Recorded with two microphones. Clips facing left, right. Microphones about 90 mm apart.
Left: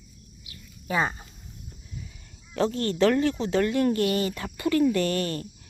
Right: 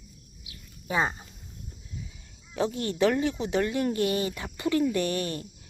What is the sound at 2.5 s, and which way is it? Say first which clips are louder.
Speech: left 3 dB; 15° right (ahead or behind).